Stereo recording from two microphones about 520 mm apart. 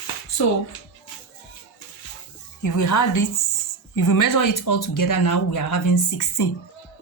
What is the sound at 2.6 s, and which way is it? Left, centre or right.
Speech, left.